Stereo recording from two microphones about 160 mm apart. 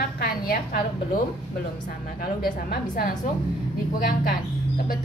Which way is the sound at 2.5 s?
65° left (ahead or behind).